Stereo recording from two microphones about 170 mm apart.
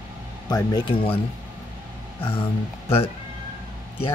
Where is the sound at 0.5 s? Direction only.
25° left (ahead or behind).